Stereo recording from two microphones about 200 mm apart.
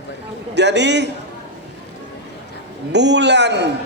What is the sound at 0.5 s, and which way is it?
Speech, 60° right (ahead or behind).